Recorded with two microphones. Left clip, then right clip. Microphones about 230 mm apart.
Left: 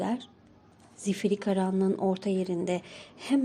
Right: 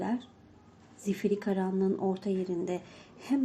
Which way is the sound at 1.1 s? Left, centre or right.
Left.